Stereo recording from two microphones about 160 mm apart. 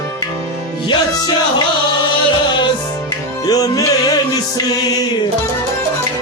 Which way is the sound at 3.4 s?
20° left (ahead or behind).